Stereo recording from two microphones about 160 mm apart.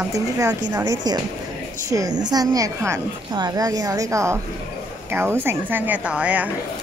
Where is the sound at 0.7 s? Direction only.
25° right (ahead or behind).